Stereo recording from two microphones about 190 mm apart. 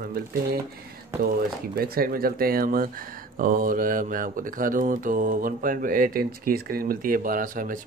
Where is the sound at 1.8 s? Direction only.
50° right (ahead or behind).